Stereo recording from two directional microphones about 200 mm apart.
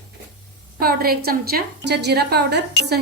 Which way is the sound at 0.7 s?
50° right (ahead or behind).